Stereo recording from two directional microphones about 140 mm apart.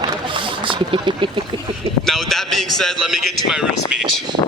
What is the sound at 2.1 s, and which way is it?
Speech, centre (ahead or behind).